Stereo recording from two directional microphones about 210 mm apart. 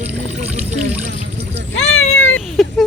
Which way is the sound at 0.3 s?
35° right (ahead or behind).